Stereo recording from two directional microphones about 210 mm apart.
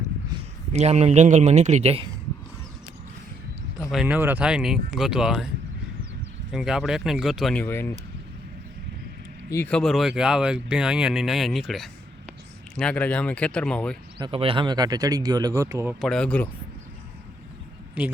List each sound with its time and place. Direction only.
0.7 s a man's voice: 30° right (ahead or behind)
3.9 s speech: 5° right (ahead or behind)
6.5 s speech: centre (ahead or behind)
9.5 s speech: 10° left (ahead or behind)
14.2 s speech: 25° right (ahead or behind)
16.0 s speech: 5° left (ahead or behind)
18.0 s speech: 5° right (ahead or behind)